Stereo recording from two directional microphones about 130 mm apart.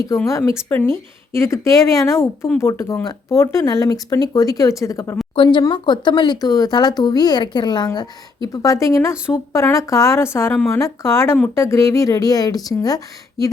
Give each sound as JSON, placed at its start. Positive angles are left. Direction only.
{"t": 0.3, "sound": "speech", "side_deg": 25}
{"t": 5.3, "sound": "speech", "side_deg": 40}